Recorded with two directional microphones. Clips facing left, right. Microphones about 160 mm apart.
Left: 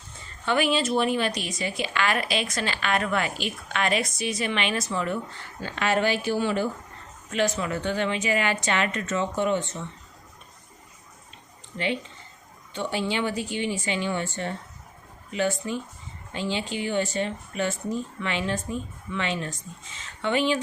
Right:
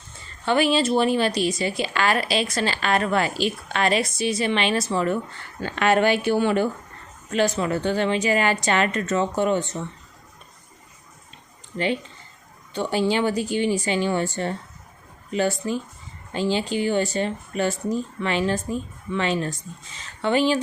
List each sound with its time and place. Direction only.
0.4 s a woman's voice: 30° right (ahead or behind)
5.5 s speech: 60° right (ahead or behind)
7.3 s a woman's voice: 35° right (ahead or behind)
12.7 s a woman's voice: 35° right (ahead or behind)